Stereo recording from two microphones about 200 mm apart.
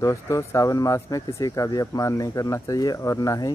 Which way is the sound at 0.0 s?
15° left (ahead or behind).